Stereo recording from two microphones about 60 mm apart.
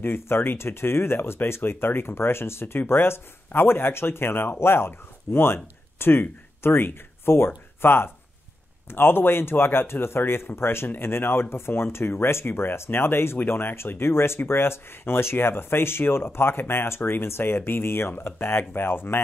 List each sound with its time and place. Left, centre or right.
0.0 s speech: left